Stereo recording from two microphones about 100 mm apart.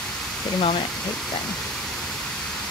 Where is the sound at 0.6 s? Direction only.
85° left.